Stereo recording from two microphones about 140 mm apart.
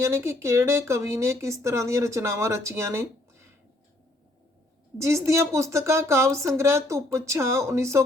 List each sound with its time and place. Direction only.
0.0 s speech: 20° right (ahead or behind)
4.9 s speech: 20° right (ahead or behind)